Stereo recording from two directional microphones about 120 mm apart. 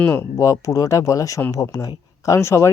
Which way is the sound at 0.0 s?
20° left (ahead or behind).